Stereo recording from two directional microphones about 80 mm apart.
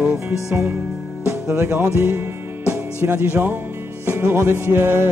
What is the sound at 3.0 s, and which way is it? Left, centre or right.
Speech, right.